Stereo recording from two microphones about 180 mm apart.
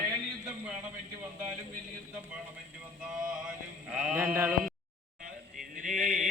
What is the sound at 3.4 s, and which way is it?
Mantra, 5° right (ahead or behind).